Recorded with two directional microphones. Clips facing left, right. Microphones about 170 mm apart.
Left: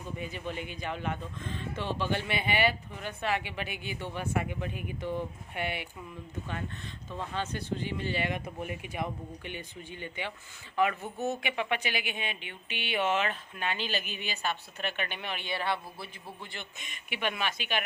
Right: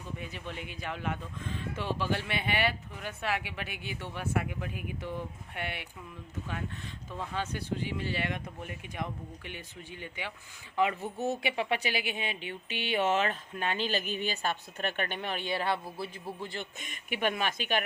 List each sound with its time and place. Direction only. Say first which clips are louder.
0.2 s speech: left 4 dB; centre (ahead or behind)
7.1 s speech: left 1 dB; 5° right (ahead or behind)
11.2 s a man's voice: right 1 dB; 35° right (ahead or behind)